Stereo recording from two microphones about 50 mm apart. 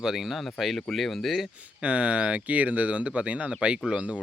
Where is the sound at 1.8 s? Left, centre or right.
Right.